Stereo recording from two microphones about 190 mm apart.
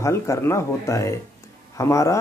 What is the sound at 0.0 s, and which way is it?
Speech, 15° left (ahead or behind).